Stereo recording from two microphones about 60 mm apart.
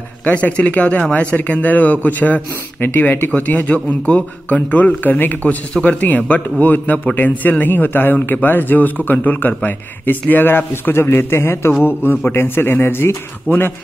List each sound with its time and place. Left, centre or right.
0.2 s a man's voice: left
11.8 s a man's voice: left